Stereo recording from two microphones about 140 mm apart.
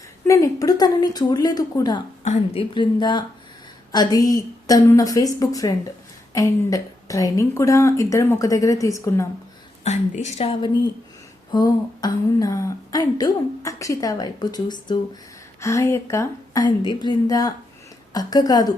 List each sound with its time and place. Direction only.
0.3 s a woman's voice: 20° left (ahead or behind)
2.2 s a woman's voice: 50° left (ahead or behind); by 9.2 s 20° left (ahead or behind)
9.8 s a woman's voice: 50° left (ahead or behind)
11.5 s a woman's voice: 30° left (ahead or behind)
16.6 s a woman's voice: 30° left (ahead or behind)